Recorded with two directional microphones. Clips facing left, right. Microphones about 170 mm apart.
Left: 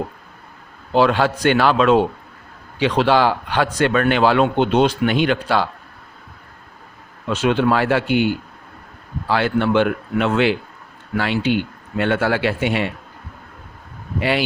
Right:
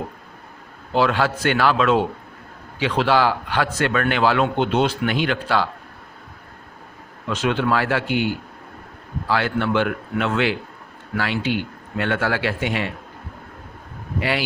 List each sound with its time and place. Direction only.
0.9 s a man's voice: 20° left (ahead or behind)
7.3 s a man's voice: 20° left (ahead or behind)
9.3 s a man's voice: 20° left (ahead or behind)
14.2 s a man's voice: 20° left (ahead or behind)